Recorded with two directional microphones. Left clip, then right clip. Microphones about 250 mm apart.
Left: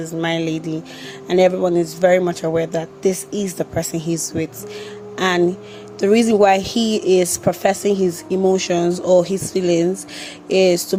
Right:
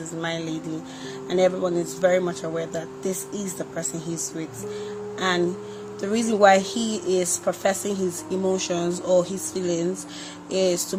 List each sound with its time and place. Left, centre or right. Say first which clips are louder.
0.2 s speech: left 8 dB; left
5.1 s music: left 6 dB; left
6.0 s speech: left 6 dB; left